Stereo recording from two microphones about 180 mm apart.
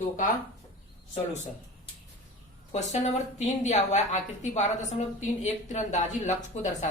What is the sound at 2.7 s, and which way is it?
A woman's voice, 40° left (ahead or behind).